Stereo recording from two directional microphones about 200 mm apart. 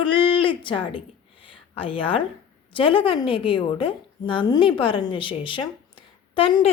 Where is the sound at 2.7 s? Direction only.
25° left (ahead or behind).